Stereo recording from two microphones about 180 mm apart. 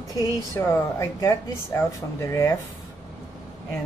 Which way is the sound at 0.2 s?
20° left (ahead or behind).